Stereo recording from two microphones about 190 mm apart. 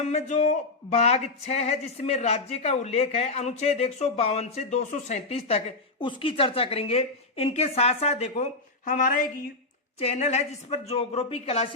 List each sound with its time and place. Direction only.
0.0 s speech: 40° left (ahead or behind)
10.0 s speech: 35° left (ahead or behind)